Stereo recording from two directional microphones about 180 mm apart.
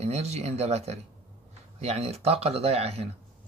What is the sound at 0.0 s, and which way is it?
Speech, 35° right (ahead or behind).